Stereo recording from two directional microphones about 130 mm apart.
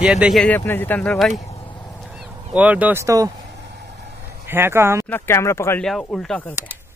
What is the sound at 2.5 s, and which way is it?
Speech, 10° right (ahead or behind).